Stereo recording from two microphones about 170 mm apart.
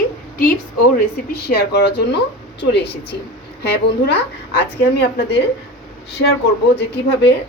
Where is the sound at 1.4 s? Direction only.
70° left (ahead or behind).